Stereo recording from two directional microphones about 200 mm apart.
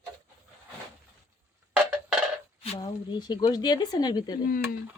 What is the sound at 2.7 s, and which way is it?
Speech, 20° left (ahead or behind).